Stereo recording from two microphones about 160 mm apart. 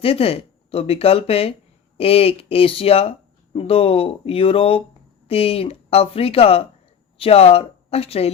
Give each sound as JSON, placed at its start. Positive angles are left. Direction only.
{"t": 0.0, "sound": "speech", "side_deg": 35}